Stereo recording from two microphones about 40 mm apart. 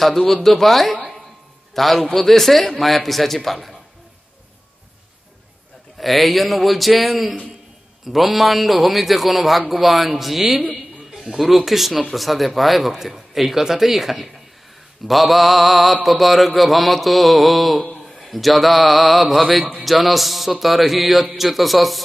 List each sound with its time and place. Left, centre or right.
0.0 s a man's voice: centre
5.9 s speech: centre
11.1 s a sound: centre
11.3 s speech: centre